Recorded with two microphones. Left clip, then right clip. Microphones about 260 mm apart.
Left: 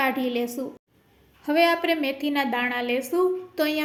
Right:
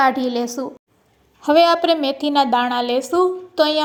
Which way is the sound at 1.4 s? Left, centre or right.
Right.